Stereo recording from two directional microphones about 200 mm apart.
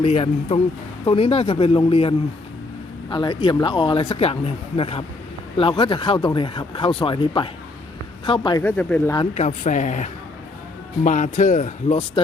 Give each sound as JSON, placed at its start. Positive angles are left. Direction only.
{"t": 0.0, "sound": "speech", "side_deg": 30}
{"t": 8.6, "sound": "speech", "side_deg": 5}
{"t": 9.3, "sound": "speech", "side_deg": 35}